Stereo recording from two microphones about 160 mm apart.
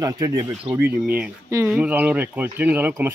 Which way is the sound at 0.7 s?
10° right (ahead or behind).